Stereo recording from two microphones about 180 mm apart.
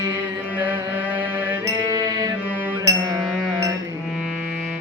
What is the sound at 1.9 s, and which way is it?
Music, 20° right (ahead or behind).